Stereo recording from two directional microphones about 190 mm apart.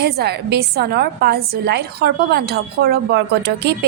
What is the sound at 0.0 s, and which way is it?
A woman's voice, 60° right (ahead or behind).